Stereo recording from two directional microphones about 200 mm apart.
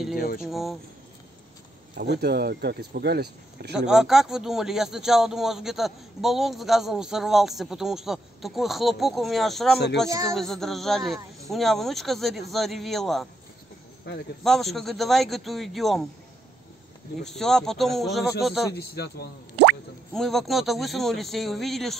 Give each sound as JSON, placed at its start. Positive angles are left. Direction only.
{"t": 0.4, "sound": "speech", "side_deg": 0}
{"t": 2.0, "sound": "speech", "side_deg": -55}
{"t": 3.7, "sound": "speech", "side_deg": -5}
{"t": 10.0, "sound": "speech", "side_deg": -15}
{"t": 10.3, "sound": "speech", "side_deg": 0}
{"t": 14.4, "sound": "speech", "side_deg": 0}
{"t": 17.2, "sound": "speech", "side_deg": 0}
{"t": 18.9, "sound": "a man's voice", "side_deg": 50}
{"t": 20.1, "sound": "speech", "side_deg": 0}